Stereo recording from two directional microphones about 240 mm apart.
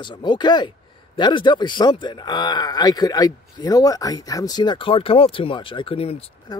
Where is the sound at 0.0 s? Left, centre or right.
Centre.